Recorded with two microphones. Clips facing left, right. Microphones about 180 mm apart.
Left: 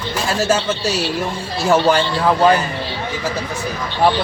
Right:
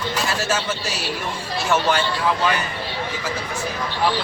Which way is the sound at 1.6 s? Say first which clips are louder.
Left 6 dB; 35° left (ahead or behind).